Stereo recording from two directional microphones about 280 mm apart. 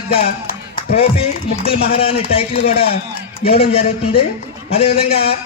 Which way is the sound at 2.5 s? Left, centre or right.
Left.